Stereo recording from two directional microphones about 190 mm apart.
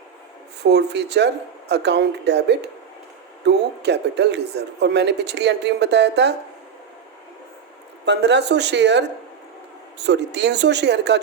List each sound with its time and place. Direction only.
0.6 s speech: 60° right (ahead or behind)
8.0 s speech: 65° right (ahead or behind)